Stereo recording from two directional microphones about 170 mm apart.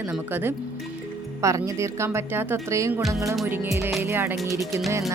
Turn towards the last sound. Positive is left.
turn(degrees=-15)  # may be behind; listen again after turning